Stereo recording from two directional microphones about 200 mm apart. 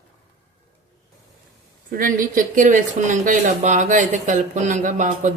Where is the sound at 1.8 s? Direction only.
45° right (ahead or behind).